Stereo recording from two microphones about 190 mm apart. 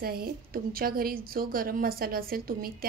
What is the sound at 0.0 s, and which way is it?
A woman's voice, 50° right (ahead or behind).